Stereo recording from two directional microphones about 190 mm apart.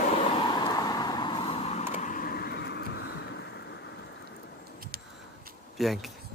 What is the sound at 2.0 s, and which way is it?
Vehicle, 45° left (ahead or behind).